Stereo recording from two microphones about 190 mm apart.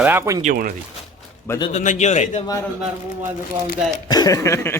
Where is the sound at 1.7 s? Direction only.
40° left (ahead or behind).